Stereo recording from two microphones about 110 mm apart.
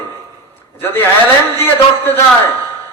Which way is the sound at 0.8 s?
20° left (ahead or behind).